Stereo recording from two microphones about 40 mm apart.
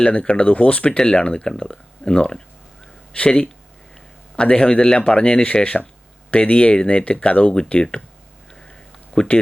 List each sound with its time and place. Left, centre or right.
0.0 s speech: left
0.9 s speech: left
9.2 s speech: left